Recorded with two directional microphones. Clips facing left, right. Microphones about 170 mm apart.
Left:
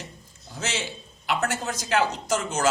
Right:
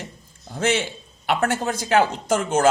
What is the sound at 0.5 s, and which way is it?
A man's voice, 55° right (ahead or behind).